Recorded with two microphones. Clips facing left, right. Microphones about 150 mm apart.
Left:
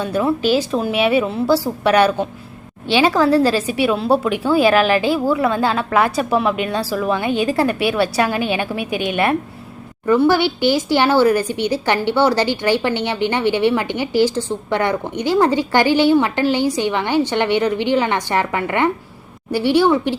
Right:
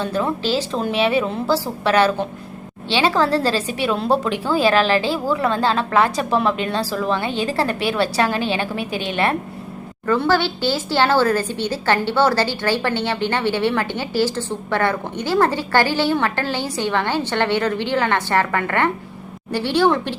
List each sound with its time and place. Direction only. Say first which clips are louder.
0.0 s a woman's voice: left 4 dB; 10° left (ahead or behind)